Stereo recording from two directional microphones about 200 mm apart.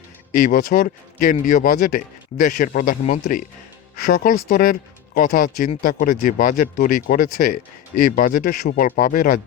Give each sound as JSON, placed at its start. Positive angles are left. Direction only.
{"t": 0.3, "sound": "speech", "side_deg": 40}